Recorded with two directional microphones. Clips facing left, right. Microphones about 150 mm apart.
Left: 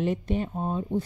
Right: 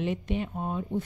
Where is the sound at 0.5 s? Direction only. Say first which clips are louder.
Left 3 dB; 25° left (ahead or behind).